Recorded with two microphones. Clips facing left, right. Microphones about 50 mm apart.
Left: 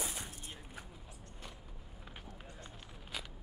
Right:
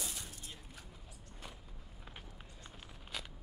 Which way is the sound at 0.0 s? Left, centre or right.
Left.